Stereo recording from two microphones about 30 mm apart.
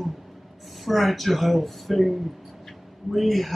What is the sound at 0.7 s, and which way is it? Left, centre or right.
Speech, centre.